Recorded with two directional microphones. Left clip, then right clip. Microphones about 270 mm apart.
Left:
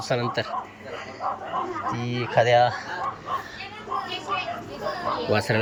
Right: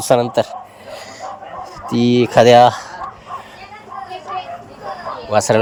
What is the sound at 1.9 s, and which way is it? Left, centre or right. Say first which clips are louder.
Speech: right 15 dB; right.